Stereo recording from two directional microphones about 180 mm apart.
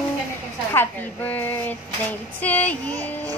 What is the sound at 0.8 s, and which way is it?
Speech, 10° left (ahead or behind).